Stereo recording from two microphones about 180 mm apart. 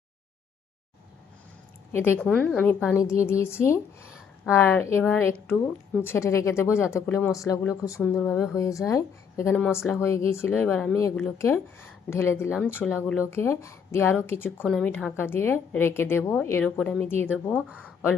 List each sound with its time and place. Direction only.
1.9 s a woman's voice: 10° left (ahead or behind)
12.8 s speech: 5° right (ahead or behind)
13.3 s a woman's voice: 15° left (ahead or behind)